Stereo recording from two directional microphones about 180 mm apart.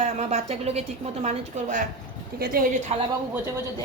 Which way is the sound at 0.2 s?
40° right (ahead or behind).